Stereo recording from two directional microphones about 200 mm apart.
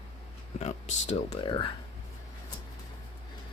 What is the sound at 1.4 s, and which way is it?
Speech, 25° left (ahead or behind).